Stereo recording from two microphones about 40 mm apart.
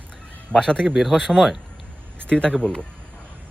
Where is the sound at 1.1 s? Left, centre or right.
Centre.